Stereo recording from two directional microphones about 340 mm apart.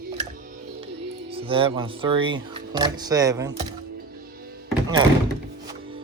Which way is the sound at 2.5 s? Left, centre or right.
Centre.